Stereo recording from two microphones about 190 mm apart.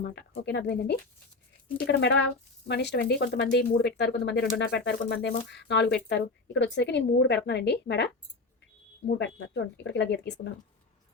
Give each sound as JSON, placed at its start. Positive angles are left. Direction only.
{"t": 0.0, "sound": "speech", "side_deg": 60}